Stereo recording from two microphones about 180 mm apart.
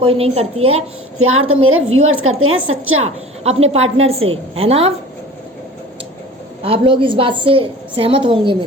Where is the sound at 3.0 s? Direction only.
35° right (ahead or behind).